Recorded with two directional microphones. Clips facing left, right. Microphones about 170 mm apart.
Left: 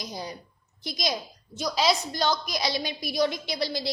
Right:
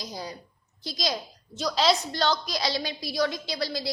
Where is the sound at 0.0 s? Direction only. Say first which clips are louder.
Left 1 dB; 20° left (ahead or behind).